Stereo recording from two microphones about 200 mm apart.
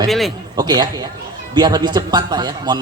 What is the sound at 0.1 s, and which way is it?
Speech, centre (ahead or behind).